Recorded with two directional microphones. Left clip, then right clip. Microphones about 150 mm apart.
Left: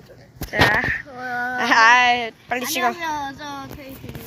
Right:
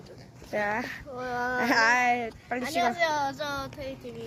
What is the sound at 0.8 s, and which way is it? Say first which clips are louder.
Speech: left 12 dB; 10° right (ahead or behind).